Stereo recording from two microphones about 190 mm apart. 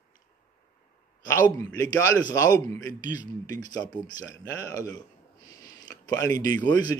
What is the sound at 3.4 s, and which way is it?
Speech, 20° left (ahead or behind).